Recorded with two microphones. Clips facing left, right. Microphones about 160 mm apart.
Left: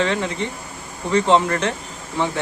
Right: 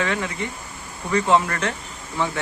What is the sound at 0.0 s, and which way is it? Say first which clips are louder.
Speech: left 3 dB; 20° left (ahead or behind).